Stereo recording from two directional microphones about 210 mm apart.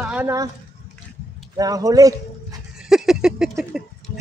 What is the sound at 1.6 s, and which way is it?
Speech, 15° right (ahead or behind).